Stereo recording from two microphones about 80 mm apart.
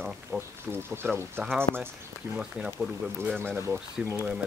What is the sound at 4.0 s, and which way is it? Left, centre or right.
Speech, centre.